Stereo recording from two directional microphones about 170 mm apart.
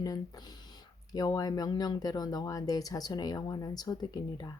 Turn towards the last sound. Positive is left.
turn(degrees=25)  # may be behind; listen again after turning